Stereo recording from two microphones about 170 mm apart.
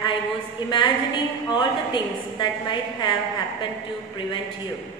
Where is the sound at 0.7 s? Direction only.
25° left (ahead or behind).